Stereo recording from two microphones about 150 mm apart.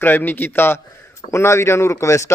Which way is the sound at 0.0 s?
10° left (ahead or behind).